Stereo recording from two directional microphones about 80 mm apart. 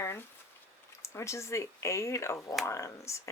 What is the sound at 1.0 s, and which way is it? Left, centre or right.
Speech, left.